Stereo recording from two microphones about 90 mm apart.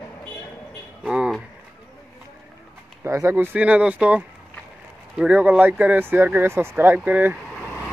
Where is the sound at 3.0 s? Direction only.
30° right (ahead or behind).